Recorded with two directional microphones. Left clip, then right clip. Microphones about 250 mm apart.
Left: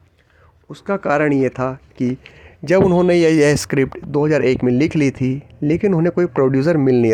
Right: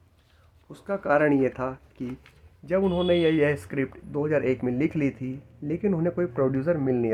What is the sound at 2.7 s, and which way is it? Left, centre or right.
Speech, left.